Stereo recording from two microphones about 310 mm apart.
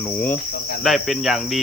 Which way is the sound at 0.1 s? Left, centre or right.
Centre.